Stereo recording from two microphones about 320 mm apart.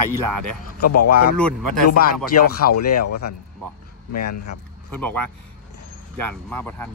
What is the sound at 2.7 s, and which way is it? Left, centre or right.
Speech, left.